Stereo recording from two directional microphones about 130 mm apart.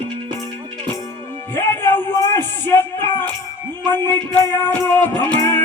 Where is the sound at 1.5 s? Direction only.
15° left (ahead or behind).